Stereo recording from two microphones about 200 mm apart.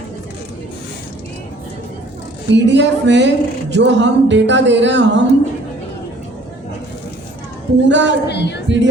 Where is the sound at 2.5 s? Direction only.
60° right (ahead or behind).